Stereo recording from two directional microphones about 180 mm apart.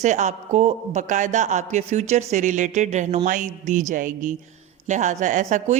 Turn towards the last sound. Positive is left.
turn(degrees=-45)  # may be behind; listen again after turning